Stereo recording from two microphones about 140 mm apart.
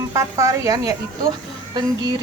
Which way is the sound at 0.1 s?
25° right (ahead or behind).